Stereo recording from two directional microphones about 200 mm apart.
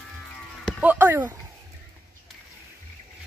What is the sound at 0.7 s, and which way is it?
Speech, 5° right (ahead or behind).